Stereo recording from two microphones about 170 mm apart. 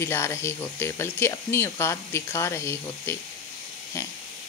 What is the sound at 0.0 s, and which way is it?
Speech, 15° left (ahead or behind).